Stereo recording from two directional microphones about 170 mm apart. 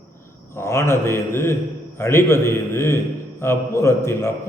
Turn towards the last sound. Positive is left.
turn(degrees=15)  # may be behind; listen again after turning